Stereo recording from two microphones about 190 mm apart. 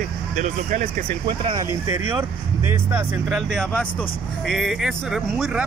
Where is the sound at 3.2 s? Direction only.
Centre (ahead or behind).